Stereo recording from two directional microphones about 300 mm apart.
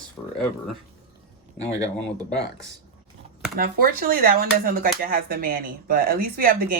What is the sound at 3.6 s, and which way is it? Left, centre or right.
Speech, right.